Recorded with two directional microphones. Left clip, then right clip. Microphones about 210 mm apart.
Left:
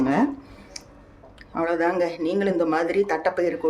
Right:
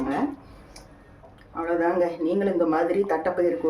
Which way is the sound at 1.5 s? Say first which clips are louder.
Left 1 dB; 50° left (ahead or behind).